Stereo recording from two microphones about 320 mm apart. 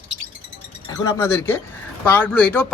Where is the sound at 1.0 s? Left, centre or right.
Centre.